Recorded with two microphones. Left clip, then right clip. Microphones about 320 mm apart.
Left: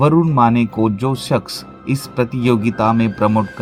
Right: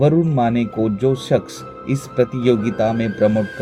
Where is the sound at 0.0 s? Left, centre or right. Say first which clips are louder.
Left 3 dB; left.